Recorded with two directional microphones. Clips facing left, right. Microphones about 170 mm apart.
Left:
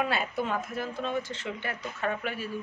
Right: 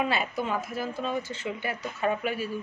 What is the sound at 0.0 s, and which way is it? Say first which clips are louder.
A woman's voice: right 1 dB; centre (ahead or behind).